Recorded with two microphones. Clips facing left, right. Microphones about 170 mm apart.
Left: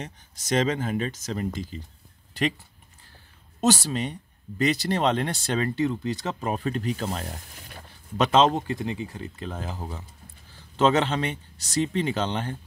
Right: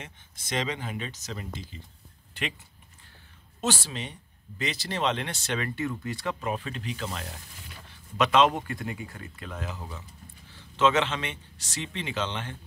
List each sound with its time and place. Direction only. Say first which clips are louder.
0.0 s speech: left 7 dB; 40° left (ahead or behind)
3.6 s speech: left 7 dB; 40° left (ahead or behind)
8.2 s speech: left 2 dB; 30° left (ahead or behind)